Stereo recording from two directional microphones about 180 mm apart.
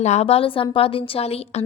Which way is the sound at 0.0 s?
40° left (ahead or behind).